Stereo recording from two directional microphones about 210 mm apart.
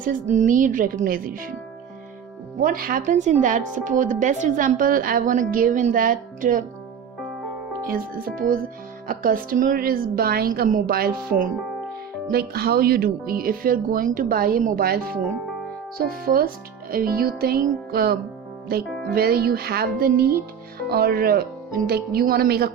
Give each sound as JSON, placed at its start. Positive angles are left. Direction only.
{"t": 0.0, "sound": "speech", "side_deg": -40}
{"t": 2.6, "sound": "speech", "side_deg": -45}
{"t": 7.9, "sound": "speech", "side_deg": -40}